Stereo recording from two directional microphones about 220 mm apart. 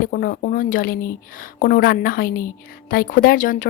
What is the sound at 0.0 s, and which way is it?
Speech, 40° left (ahead or behind).